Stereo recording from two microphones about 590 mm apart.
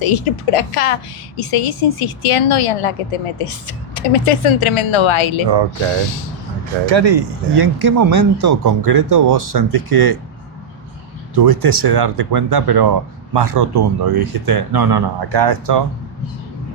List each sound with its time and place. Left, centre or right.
0.0 s a woman's voice: left
6.9 s speech: right
11.4 s speech: right